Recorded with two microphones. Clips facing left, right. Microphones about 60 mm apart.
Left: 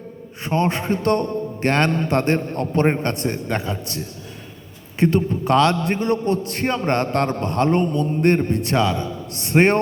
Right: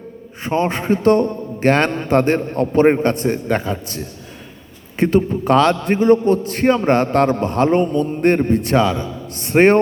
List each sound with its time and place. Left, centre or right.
0.4 s a man's voice: centre
2.1 s a man's voice: right
4.9 s a man's voice: centre